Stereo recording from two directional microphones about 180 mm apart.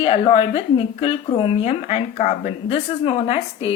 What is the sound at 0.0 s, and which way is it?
Speech, 35° left (ahead or behind).